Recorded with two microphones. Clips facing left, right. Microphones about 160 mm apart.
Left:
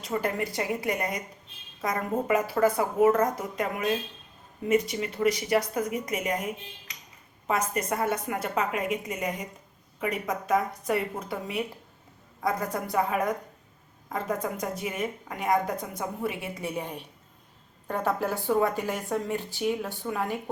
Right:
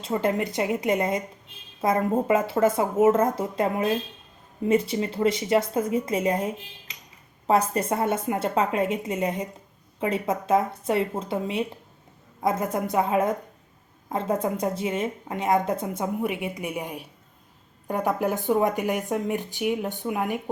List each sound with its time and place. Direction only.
0.0 s speech: 25° right (ahead or behind)